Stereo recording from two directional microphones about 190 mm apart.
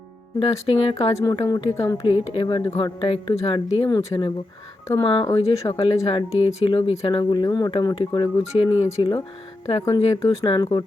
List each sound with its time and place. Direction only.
0.3 s speech: 30° left (ahead or behind)
1.1 s speech: 20° left (ahead or behind)
2.2 s speech: 30° left (ahead or behind)